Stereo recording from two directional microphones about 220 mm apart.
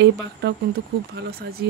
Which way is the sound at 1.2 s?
45° right (ahead or behind).